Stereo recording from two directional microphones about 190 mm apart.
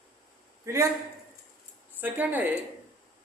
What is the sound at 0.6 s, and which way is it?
Speech, 15° right (ahead or behind).